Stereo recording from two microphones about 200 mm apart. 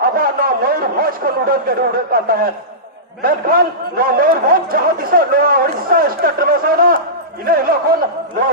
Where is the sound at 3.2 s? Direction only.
45° right (ahead or behind).